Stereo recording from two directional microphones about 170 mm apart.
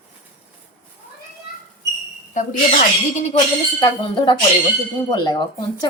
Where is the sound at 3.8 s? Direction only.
30° left (ahead or behind).